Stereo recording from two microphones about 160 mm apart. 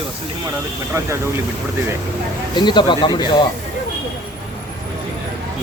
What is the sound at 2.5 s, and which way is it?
Speech, 30° left (ahead or behind).